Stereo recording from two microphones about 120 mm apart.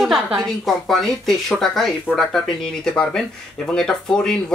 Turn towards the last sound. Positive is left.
turn(degrees=5)  # may be behind; listen again after turning